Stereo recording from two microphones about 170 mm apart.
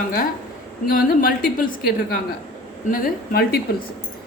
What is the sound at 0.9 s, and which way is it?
A woman's voice, 60° left (ahead or behind).